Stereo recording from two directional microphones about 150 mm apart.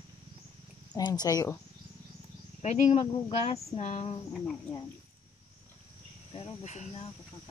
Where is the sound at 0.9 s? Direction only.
25° left (ahead or behind).